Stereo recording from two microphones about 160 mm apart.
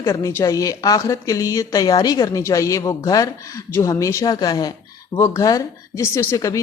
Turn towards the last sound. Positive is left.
turn(degrees=20)  # may be behind; listen again after turning